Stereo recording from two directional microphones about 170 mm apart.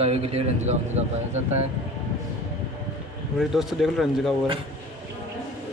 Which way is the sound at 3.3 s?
Centre (ahead or behind).